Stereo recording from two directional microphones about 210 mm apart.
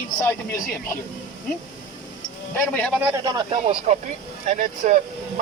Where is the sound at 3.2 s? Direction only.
25° right (ahead or behind).